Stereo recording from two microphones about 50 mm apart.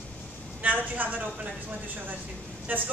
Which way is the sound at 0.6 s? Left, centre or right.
Right.